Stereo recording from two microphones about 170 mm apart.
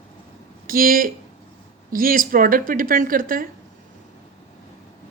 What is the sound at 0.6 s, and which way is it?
A woman's voice, 55° right (ahead or behind).